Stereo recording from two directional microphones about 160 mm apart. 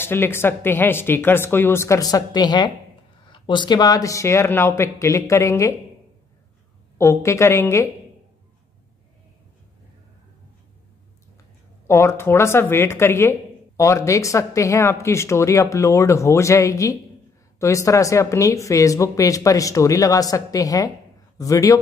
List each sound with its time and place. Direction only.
0.0 s speech: 15° left (ahead or behind)
7.0 s speech: 15° left (ahead or behind)
11.9 s speech: 15° left (ahead or behind)